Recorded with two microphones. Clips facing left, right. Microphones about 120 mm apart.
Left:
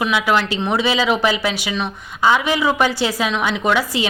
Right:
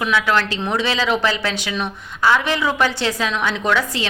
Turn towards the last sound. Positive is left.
turn(degrees=10)  # may be behind; listen again after turning